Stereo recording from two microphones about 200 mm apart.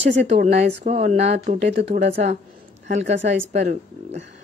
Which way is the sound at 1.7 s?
60° right (ahead or behind).